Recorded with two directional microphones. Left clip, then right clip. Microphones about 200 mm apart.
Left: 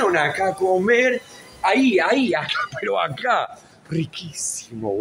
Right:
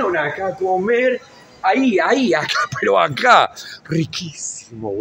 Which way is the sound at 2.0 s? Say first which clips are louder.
Right 3 dB; 55° right (ahead or behind).